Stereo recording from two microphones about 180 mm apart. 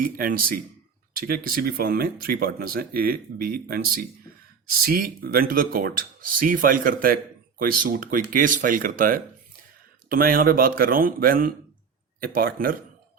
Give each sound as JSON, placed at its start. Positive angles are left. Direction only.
{"t": 0.0, "sound": "speech", "side_deg": -55}